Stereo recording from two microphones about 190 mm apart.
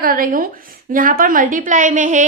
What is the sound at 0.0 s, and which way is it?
A woman's voice, 50° right (ahead or behind).